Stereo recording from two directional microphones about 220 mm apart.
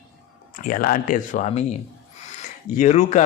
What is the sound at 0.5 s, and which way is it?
Speech, 40° left (ahead or behind).